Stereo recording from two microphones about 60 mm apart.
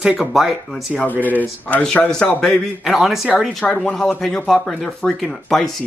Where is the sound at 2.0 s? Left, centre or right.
Centre.